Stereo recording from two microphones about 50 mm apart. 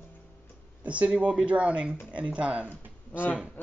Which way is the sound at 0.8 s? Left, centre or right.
Right.